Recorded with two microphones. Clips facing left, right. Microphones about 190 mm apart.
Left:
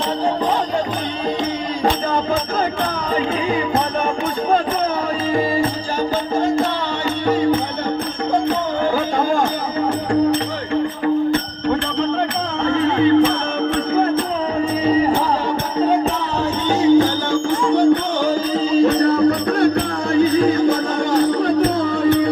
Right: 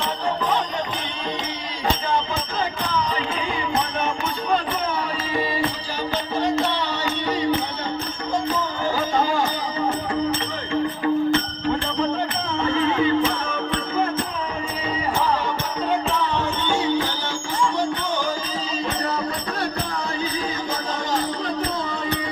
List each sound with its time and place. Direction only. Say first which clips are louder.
1.8 s music: left 3 dB; 50° left (ahead or behind)
7.3 s music: left 7 dB; 50° left (ahead or behind)
9.0 s a sound: left 4 dB; 50° left (ahead or behind)
12.6 s music: left 5 dB; 55° left (ahead or behind)
16.6 s music: left 11 dB; 40° left (ahead or behind); by 22.3 s 55° left (ahead or behind)